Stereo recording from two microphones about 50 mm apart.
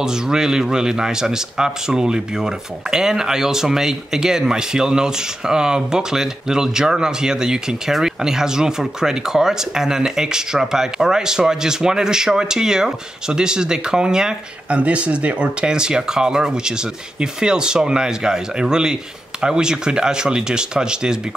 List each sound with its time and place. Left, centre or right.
0.0 s speech: centre
14.8 s speech: right